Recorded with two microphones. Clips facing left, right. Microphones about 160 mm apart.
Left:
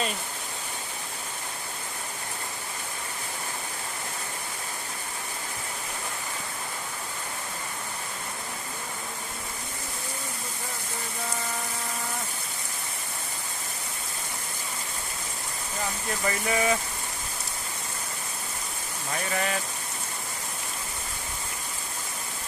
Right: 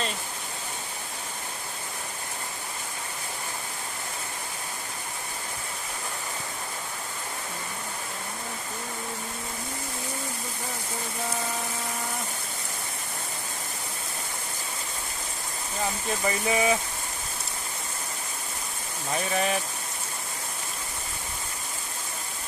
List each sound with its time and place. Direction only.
16.2 s speech: 15° right (ahead or behind)
19.3 s speech: 15° right (ahead or behind)